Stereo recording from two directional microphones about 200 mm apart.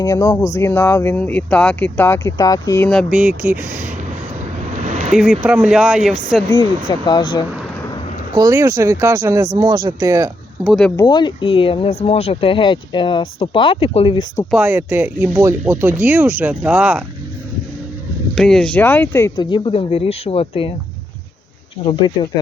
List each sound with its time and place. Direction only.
0.0 s speech: 20° left (ahead or behind); by 3.8 s 10° right (ahead or behind)
4.8 s a sound: 35° right (ahead or behind)
5.1 s speech: centre (ahead or behind)
7.0 s speech: 20° left (ahead or behind)
8.3 s speech: 20° right (ahead or behind)
10.6 s speech: centre (ahead or behind)
10.9 s speech: 20° left (ahead or behind)
14.5 s speech: 10° right (ahead or behind)
18.3 s speech: centre (ahead or behind); by 20.7 s 25° left (ahead or behind)
21.8 s speech: 25° left (ahead or behind)